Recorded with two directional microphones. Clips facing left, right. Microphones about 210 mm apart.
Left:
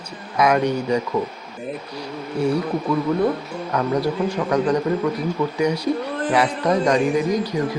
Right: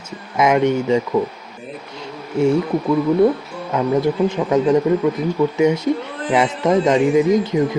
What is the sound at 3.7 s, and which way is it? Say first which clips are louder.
Speech: right 4 dB; 20° right (ahead or behind).